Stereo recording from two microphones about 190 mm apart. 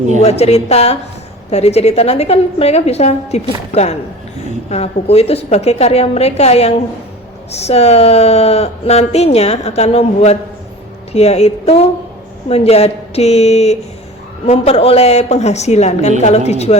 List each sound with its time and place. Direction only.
0.2 s speech: 35° left (ahead or behind)